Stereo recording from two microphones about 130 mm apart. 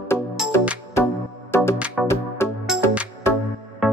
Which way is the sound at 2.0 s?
5° right (ahead or behind).